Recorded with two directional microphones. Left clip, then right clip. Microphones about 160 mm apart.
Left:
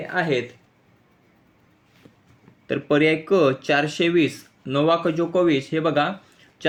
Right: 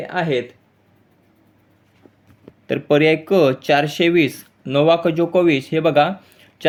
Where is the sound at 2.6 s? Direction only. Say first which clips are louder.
Right 4 dB; 20° right (ahead or behind).